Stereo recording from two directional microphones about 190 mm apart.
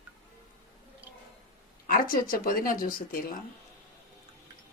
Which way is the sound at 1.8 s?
50° left (ahead or behind).